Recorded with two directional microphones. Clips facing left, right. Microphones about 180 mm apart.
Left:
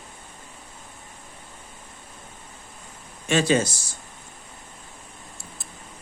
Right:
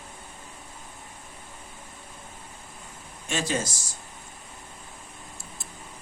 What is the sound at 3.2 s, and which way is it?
Speech, 80° left.